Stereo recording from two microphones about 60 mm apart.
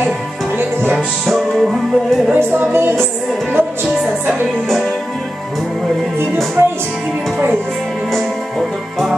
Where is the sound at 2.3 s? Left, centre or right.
Right.